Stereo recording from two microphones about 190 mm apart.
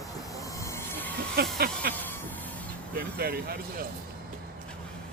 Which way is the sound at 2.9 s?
55° right (ahead or behind).